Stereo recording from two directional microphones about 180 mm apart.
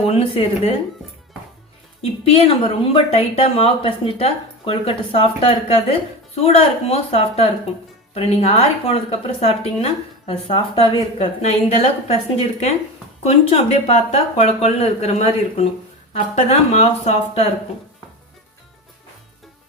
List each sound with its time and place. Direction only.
0.1 s a woman's voice: 35° left (ahead or behind)
2.0 s a woman's voice: 35° left (ahead or behind)